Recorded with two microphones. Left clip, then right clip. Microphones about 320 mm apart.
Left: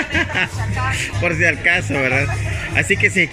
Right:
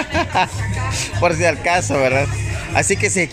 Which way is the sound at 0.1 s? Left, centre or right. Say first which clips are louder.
Right 3 dB; centre.